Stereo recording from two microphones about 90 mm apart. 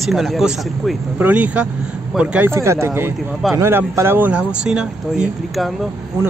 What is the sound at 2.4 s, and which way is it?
Speech, 30° right (ahead or behind).